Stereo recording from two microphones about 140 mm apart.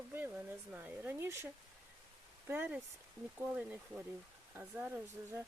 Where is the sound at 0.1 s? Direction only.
10° right (ahead or behind).